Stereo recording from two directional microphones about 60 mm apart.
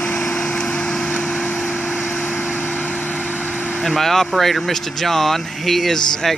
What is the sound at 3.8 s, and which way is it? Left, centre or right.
Speech, centre.